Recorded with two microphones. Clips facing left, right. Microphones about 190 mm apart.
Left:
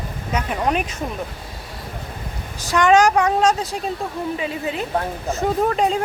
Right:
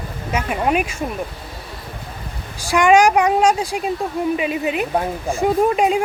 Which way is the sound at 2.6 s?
10° right (ahead or behind).